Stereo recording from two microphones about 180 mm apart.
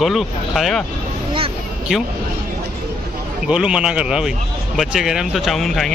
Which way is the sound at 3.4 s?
5° right (ahead or behind).